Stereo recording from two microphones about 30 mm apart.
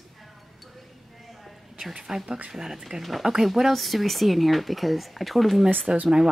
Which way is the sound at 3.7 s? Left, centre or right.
Centre.